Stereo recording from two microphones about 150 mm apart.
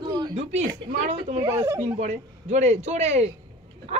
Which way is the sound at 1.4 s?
20° right (ahead or behind).